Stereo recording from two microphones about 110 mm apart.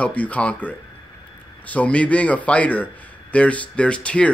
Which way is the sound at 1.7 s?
10° left (ahead or behind).